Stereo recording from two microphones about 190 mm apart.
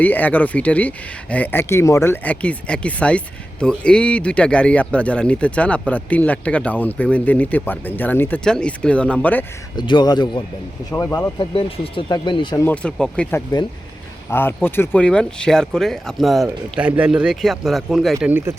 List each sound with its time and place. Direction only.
0.0 s speech: 10° left (ahead or behind)
9.7 s speech: 25° left (ahead or behind)
12.6 s speech: 5° left (ahead or behind); by 18.5 s 10° right (ahead or behind)